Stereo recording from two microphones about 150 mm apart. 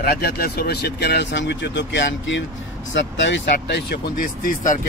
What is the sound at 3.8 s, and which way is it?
Speech, 75° left (ahead or behind).